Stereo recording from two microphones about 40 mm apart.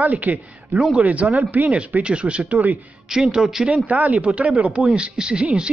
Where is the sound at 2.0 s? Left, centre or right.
Right.